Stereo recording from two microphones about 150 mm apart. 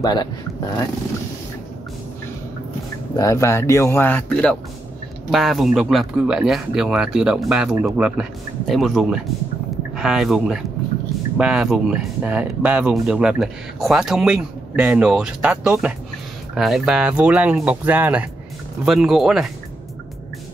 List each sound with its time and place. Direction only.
0.0 s speech: 25° left (ahead or behind)
3.2 s speech: 20° left (ahead or behind); by 19.5 s 5° right (ahead or behind)